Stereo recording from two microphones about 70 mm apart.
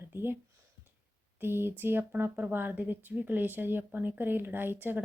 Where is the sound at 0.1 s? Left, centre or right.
Right.